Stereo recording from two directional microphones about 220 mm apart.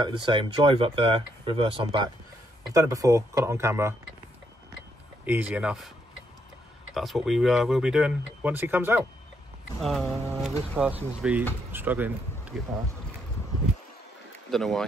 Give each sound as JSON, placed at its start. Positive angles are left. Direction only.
{"t": 0.0, "sound": "speech", "side_deg": -20}
{"t": 5.2, "sound": "speech", "side_deg": -5}
{"t": 6.9, "sound": "speech", "side_deg": 0}
{"t": 14.5, "sound": "speech", "side_deg": 0}